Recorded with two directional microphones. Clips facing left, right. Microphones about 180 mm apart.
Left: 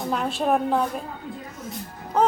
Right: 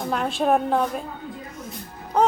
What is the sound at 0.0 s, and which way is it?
A woman's voice, centre (ahead or behind).